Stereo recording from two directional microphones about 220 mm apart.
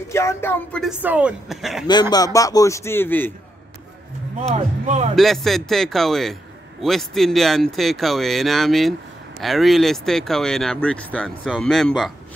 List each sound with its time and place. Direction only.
0.1 s speech: 15° left (ahead or behind)
1.9 s speech: 20° left (ahead or behind)
4.6 s speech: 30° right (ahead or behind)
5.1 s speech: centre (ahead or behind)